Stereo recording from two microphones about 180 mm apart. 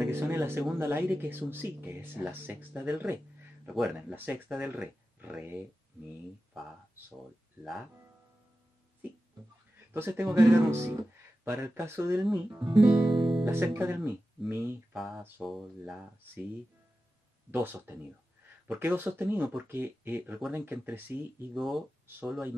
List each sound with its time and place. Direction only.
0.1 s speech: 15° right (ahead or behind)
9.9 s speech: 15° right (ahead or behind)
12.1 s speech: centre (ahead or behind)
13.1 s guitar: 30° right (ahead or behind)
13.5 s speech: 10° right (ahead or behind)
15.0 s speech: centre (ahead or behind)
17.5 s speech: 10° right (ahead or behind)
21.5 s speech: centre (ahead or behind)